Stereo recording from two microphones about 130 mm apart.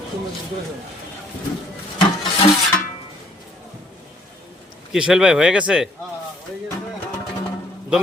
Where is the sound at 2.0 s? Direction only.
40° left (ahead or behind).